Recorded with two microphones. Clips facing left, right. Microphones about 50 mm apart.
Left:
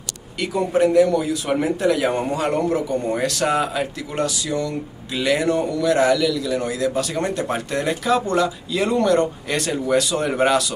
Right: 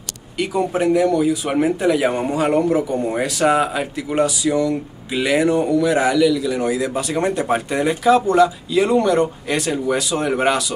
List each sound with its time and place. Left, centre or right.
0.4 s speech: centre